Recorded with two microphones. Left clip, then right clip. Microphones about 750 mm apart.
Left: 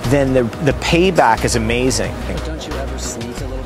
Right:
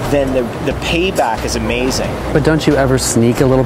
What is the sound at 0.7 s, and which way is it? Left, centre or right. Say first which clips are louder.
Speech: left 3 dB; left.